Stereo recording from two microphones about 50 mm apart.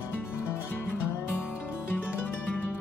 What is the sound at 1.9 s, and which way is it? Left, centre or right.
Music, left.